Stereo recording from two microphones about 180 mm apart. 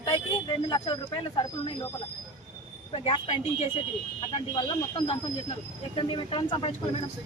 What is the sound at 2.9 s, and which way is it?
A man's voice, 25° left (ahead or behind).